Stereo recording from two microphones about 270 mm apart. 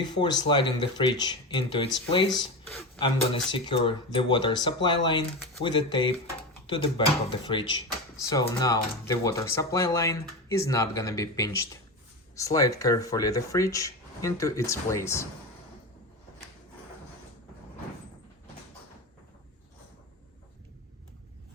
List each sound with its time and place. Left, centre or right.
0.0 s speech: centre
2.3 s speech: centre
3.5 s speech: centre